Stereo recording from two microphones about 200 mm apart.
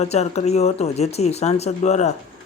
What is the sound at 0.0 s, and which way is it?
Speech, 35° left (ahead or behind).